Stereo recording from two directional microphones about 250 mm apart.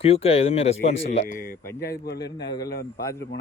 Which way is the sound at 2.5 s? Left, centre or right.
Centre.